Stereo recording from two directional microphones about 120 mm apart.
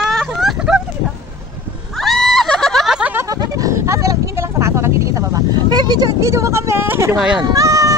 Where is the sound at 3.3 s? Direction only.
30° right (ahead or behind).